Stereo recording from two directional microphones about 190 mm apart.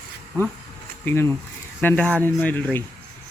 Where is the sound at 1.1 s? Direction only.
10° left (ahead or behind).